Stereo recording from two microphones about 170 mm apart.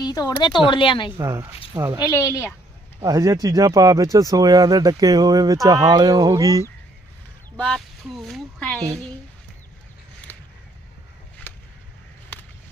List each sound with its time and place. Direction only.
0.0 s speech: 20° left (ahead or behind)
1.7 s speech: 20° right (ahead or behind)
2.0 s speech: 20° left (ahead or behind)
3.0 s speech: 20° right (ahead or behind)
7.5 s speech: 5° left (ahead or behind)